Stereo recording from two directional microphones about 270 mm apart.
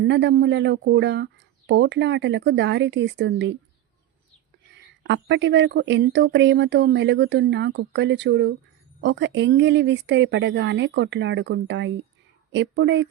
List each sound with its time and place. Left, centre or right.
0.0 s speech: right
4.7 s speech: right